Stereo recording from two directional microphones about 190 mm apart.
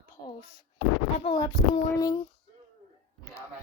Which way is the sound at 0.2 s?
25° left (ahead or behind).